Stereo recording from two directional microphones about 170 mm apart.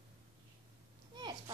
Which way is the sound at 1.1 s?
25° right (ahead or behind).